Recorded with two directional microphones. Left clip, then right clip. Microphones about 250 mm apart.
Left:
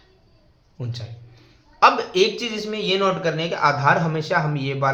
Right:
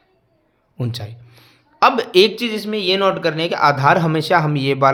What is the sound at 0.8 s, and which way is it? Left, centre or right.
Speech, right.